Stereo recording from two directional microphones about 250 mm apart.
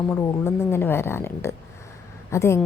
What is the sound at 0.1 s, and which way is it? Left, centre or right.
Speech, centre.